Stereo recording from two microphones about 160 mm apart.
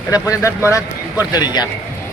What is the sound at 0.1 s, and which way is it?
Speech, 20° left (ahead or behind).